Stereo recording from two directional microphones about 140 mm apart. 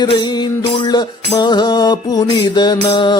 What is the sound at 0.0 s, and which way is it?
Music, 30° left (ahead or behind).